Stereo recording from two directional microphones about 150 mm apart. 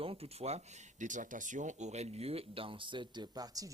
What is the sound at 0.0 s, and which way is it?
Speech, 40° right (ahead or behind).